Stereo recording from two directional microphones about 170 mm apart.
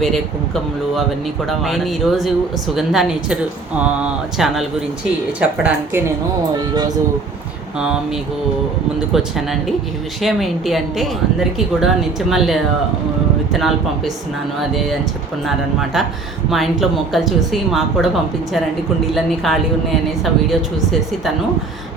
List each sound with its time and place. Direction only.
1.5 s a woman's voice: centre (ahead or behind)
6.5 s speech: 20° right (ahead or behind)
9.1 s speech: centre (ahead or behind)
19.1 s speech: centre (ahead or behind)